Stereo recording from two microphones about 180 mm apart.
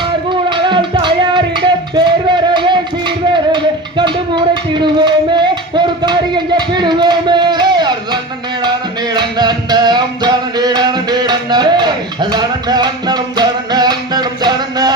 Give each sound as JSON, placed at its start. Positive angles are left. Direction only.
{"t": 0.0, "sound": "music", "side_deg": -25}